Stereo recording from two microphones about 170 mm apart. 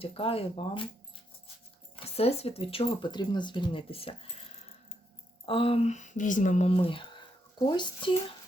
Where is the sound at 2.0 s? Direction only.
35° left (ahead or behind).